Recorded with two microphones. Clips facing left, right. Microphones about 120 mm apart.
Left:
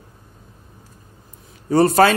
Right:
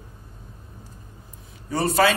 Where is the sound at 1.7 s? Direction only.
45° left (ahead or behind).